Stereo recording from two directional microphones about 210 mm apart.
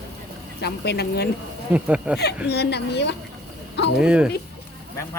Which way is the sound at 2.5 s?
50° left (ahead or behind).